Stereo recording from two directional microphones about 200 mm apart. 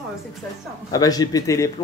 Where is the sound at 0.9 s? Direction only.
20° left (ahead or behind).